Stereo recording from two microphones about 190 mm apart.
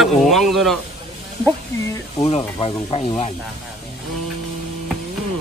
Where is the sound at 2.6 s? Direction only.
30° left (ahead or behind).